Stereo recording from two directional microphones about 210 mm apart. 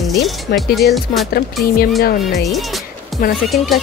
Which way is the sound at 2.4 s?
Centre (ahead or behind).